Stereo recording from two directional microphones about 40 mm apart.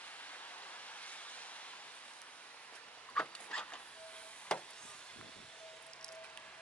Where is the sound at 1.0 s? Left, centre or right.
Left.